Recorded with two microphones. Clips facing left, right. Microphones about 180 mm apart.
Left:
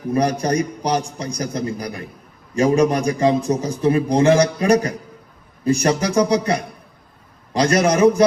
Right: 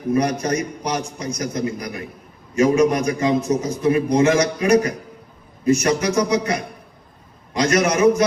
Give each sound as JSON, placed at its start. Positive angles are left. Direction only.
{"t": 0.1, "sound": "a man's voice", "side_deg": 30}